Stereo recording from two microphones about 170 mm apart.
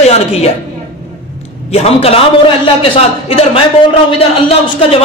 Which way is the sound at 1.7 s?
35° left (ahead or behind).